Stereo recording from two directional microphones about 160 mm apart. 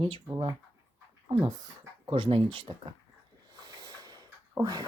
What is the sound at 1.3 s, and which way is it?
Speech, 35° right (ahead or behind).